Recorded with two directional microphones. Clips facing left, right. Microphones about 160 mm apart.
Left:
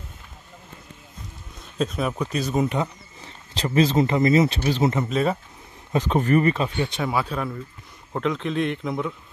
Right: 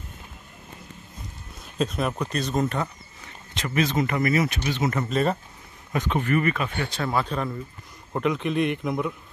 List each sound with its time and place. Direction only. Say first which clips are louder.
1.8 s speech: left 1 dB; centre (ahead or behind)
3.3 s speech: left 4 dB; 30° left (ahead or behind)
5.1 s speech: left 1 dB; centre (ahead or behind)
5.9 s speech: left 4 dB; 35° left (ahead or behind)
6.8 s speech: left 3 dB; 20° left (ahead or behind)
7.1 s speech: even; 5° left (ahead or behind)
8.1 s speech: even; 5° right (ahead or behind)